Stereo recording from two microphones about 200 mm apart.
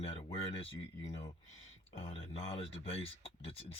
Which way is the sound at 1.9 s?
30° left (ahead or behind).